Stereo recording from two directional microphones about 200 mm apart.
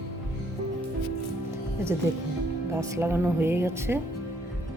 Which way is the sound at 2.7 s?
15° right (ahead or behind).